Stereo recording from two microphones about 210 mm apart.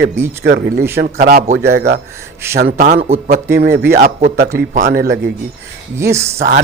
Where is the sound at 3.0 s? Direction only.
30° right (ahead or behind).